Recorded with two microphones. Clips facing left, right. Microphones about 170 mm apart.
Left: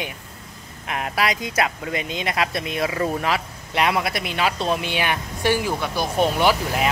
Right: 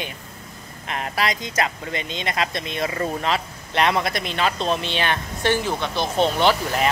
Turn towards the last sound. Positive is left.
turn(degrees=5)  # may be behind; listen again after turning